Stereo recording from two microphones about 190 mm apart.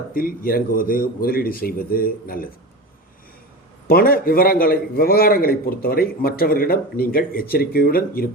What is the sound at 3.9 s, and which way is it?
A man's voice, 50° left (ahead or behind).